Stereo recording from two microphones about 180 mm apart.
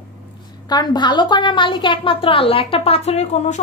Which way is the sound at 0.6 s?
25° left (ahead or behind).